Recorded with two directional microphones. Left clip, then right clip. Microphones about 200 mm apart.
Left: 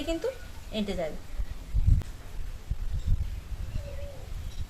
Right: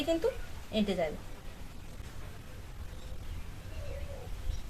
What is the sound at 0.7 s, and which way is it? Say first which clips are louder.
Speech: right 1 dB; centre (ahead or behind).